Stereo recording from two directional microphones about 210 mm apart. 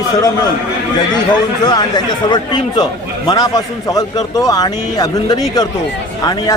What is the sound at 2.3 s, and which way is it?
A man's voice, 20° left (ahead or behind).